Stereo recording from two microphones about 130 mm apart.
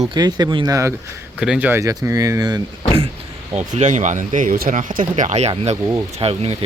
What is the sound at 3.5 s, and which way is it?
Speech, 65° right (ahead or behind).